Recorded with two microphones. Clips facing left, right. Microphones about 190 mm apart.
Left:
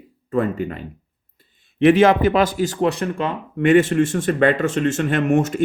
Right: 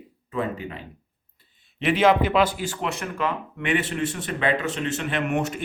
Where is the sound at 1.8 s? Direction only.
50° left (ahead or behind); by 3.3 s 30° left (ahead or behind).